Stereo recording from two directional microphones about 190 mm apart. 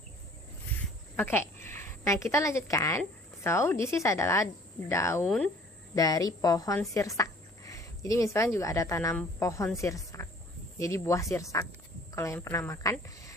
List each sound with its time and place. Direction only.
1.1 s a woman's voice: 10° left (ahead or behind)
5.2 s speech: 5° left (ahead or behind)
5.9 s a woman's voice: 20° left (ahead or behind)